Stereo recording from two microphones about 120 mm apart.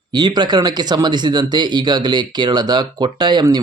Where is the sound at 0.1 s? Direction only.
40° right (ahead or behind).